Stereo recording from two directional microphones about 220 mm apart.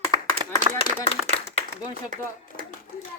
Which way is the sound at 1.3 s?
30° left (ahead or behind).